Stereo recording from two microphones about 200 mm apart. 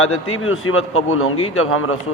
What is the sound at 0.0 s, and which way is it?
A man's voice, 90° left.